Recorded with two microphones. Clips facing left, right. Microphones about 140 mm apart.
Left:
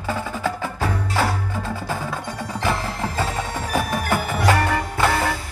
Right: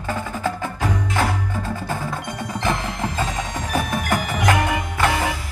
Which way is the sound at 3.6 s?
5° left (ahead or behind).